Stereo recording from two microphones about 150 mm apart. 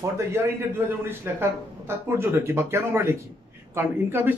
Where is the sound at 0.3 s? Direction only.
15° right (ahead or behind).